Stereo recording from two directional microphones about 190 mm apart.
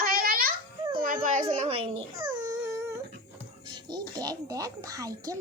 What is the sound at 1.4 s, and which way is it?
Baby cry, 30° right (ahead or behind).